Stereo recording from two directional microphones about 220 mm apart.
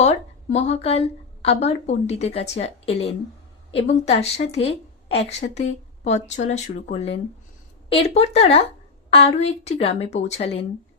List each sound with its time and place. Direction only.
0.0 s a woman's voice: 30° left (ahead or behind)